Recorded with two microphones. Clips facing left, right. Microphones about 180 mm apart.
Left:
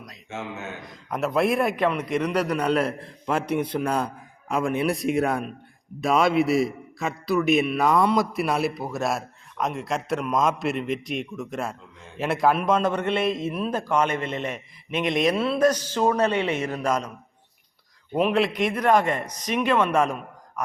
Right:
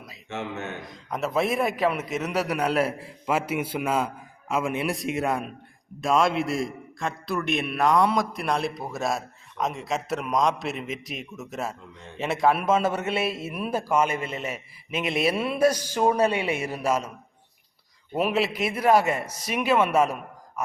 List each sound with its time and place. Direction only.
0.3 s a man's voice: 65° right (ahead or behind)
0.8 s a man's voice: centre (ahead or behind)
18.1 s a man's voice: 5° right (ahead or behind)